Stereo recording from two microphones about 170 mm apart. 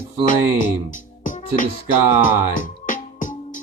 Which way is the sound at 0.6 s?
50° left (ahead or behind).